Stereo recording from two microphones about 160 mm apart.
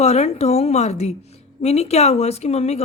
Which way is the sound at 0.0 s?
40° left (ahead or behind).